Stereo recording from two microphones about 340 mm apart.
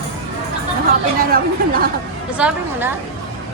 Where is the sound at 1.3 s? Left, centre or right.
Right.